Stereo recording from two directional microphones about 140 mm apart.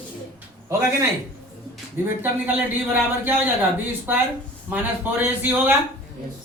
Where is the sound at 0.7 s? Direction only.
20° right (ahead or behind).